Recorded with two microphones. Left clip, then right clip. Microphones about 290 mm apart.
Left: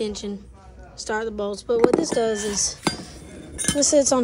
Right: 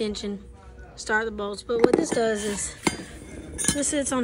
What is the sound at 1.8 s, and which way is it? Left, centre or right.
Speech, centre.